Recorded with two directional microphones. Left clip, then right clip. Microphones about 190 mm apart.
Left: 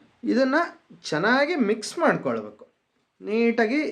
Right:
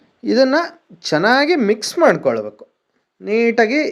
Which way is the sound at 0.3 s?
25° right (ahead or behind).